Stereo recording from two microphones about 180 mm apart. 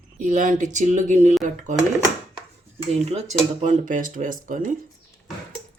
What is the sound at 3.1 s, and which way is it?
Speech, 40° right (ahead or behind).